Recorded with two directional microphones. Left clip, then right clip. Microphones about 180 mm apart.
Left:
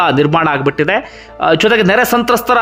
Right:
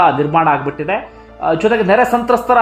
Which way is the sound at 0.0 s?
30° left (ahead or behind).